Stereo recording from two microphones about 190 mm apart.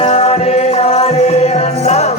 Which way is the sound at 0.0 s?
30° left (ahead or behind).